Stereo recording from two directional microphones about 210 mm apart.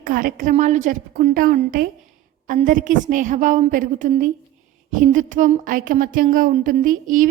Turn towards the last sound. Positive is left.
turn(degrees=-40)  # may be behind; listen again after turning